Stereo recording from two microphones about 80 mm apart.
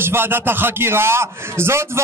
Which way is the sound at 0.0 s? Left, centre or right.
Right.